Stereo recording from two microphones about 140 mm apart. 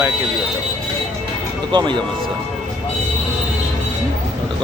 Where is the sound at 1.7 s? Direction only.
35° right (ahead or behind).